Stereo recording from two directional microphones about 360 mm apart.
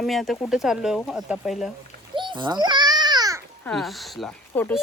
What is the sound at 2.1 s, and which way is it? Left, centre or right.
Babbling, centre.